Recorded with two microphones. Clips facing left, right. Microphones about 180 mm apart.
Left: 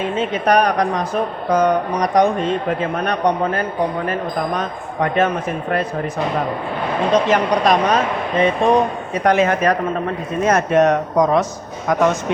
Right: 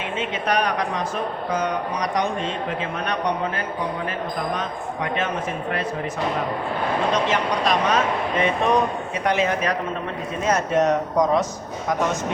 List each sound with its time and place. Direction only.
0.0 s speech: 40° left (ahead or behind)
7.1 s speech: 40° left (ahead or behind)
9.2 s speech: 50° left (ahead or behind)
10.4 s speech: 60° left (ahead or behind)